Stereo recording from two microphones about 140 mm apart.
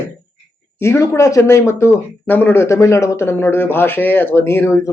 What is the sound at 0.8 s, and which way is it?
Speech, 20° left (ahead or behind).